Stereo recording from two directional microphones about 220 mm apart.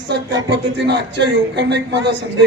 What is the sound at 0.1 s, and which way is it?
Speech, 50° right (ahead or behind).